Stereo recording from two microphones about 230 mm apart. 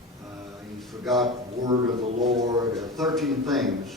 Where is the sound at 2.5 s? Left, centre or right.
Centre.